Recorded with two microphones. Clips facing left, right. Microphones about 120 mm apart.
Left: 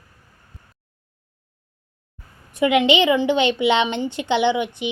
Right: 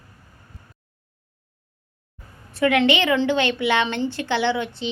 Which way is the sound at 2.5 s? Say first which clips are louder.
Left 2 dB; 15° left (ahead or behind).